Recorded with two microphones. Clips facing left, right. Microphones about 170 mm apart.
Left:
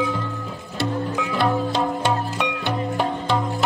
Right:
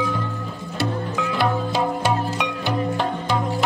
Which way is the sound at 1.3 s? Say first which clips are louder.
Left 1 dB; 5° right (ahead or behind).